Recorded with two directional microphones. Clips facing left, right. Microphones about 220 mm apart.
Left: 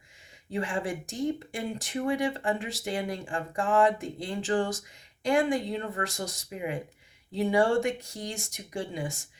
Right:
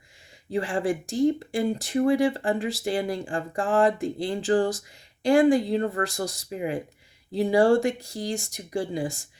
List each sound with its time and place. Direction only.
0.5 s speech: 35° right (ahead or behind)